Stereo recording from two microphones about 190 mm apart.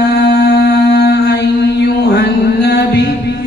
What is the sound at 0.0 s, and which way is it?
Mantra, 60° left (ahead or behind).